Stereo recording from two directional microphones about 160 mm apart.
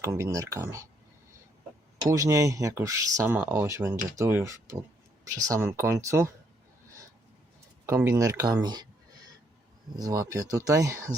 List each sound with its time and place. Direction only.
0.0 s speech: 20° right (ahead or behind)
2.0 s speech: 20° right (ahead or behind)
7.9 s speech: 15° right (ahead or behind)
9.9 s speech: 20° right (ahead or behind)